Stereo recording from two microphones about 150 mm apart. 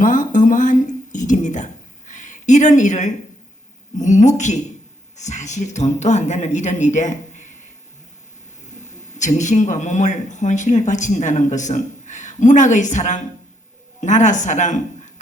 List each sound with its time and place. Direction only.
0.0 s a sound: 60° left (ahead or behind)
3.9 s speech: 55° left (ahead or behind)
8.9 s speech: 50° left (ahead or behind)